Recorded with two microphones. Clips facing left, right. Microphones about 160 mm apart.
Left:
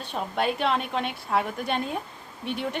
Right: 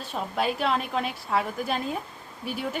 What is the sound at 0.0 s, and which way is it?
Speech, centre (ahead or behind).